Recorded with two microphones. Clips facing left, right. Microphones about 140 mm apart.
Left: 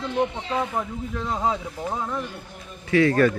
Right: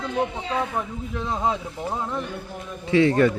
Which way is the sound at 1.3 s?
Centre (ahead or behind).